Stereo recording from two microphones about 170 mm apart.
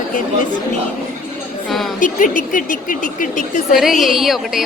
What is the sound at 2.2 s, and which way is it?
Speech, 50° left (ahead or behind).